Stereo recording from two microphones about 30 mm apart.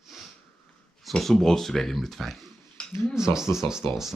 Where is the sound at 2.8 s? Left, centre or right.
Left.